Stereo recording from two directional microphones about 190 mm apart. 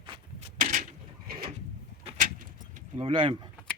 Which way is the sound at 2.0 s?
40° right (ahead or behind).